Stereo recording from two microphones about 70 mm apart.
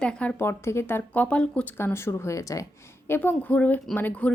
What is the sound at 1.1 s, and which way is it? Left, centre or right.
Speech, centre.